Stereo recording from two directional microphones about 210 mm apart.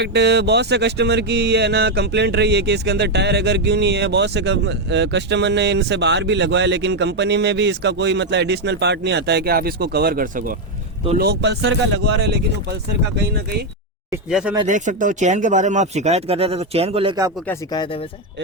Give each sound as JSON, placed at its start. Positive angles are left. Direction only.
{"t": 0.0, "sound": "speech", "side_deg": -55}
{"t": 14.3, "sound": "speech", "side_deg": 0}
{"t": 14.7, "sound": "speech", "side_deg": -35}
{"t": 17.5, "sound": "speech", "side_deg": 20}